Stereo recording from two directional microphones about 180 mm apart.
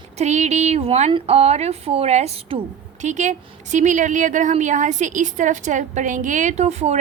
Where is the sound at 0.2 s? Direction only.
40° right (ahead or behind).